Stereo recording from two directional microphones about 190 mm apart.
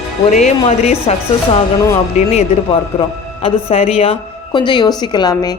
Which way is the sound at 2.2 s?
35° left (ahead or behind).